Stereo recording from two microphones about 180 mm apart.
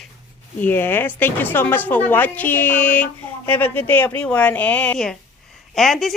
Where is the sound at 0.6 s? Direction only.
10° left (ahead or behind).